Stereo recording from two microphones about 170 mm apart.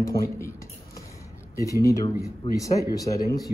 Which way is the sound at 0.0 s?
20° left (ahead or behind).